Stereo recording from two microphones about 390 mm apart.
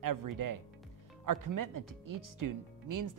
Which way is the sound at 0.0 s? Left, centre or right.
Right.